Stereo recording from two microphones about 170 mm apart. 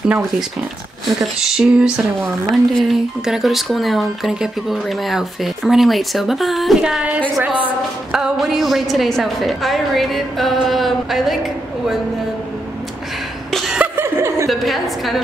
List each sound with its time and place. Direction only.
1.0 s speech: centre (ahead or behind)
13.5 s a sound: centre (ahead or behind)
13.9 s chuckle: 15° right (ahead or behind)
14.5 s speech: centre (ahead or behind)